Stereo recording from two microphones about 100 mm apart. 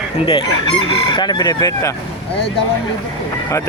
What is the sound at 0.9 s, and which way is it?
Speech, 55° left (ahead or behind).